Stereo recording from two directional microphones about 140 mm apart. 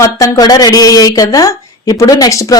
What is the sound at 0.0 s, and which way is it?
Speech, 25° left (ahead or behind).